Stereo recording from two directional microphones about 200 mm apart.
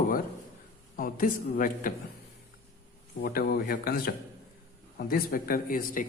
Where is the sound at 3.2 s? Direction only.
50° left (ahead or behind).